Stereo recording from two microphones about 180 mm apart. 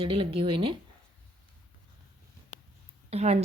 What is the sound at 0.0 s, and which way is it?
Speech, 30° right (ahead or behind).